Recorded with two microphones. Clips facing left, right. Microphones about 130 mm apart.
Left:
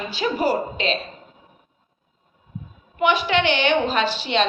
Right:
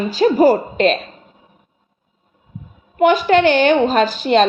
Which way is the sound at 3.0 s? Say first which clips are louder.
Right 7 dB; 45° right (ahead or behind).